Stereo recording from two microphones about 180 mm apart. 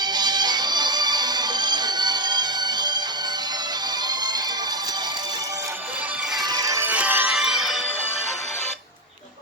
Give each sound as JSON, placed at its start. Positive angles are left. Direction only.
{"t": 0.0, "sound": "music", "side_deg": -25}
{"t": 6.4, "sound": "music", "side_deg": -20}